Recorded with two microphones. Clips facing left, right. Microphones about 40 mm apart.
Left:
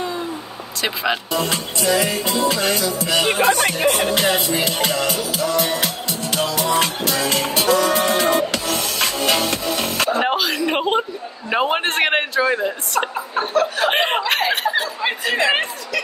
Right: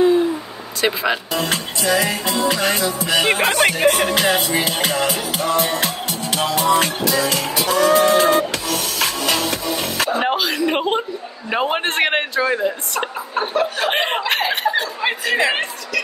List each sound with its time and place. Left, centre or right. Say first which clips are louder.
0.7 s speech: right 3 dB; centre
1.3 s music: even; right
7.2 s music: left 1 dB; left
7.7 s music: right 5 dB; right
9.2 s music: left 1 dB; left
10.2 s a woman's voice: right 1 dB; centre
13.4 s speech: left 1 dB; centre
13.8 s chuckle: left 1 dB; centre